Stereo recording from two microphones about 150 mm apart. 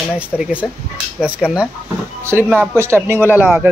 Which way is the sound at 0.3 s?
5° right (ahead or behind).